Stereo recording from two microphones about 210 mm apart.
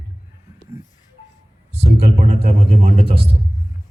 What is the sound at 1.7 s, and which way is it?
A man's voice, 30° right (ahead or behind).